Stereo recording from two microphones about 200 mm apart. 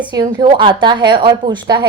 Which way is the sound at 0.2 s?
25° right (ahead or behind).